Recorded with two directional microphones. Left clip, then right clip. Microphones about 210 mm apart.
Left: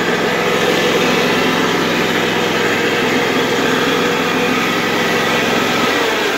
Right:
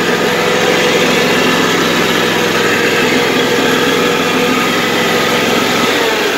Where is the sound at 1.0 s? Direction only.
10° right (ahead or behind).